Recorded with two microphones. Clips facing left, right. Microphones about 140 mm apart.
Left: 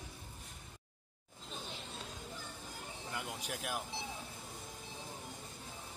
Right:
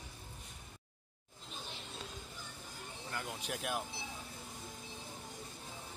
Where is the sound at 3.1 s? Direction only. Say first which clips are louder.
Right 1 dB; 10° left (ahead or behind).